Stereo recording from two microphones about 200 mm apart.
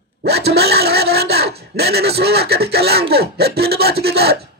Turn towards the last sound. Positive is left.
turn(degrees=-50)  # may be behind; listen again after turning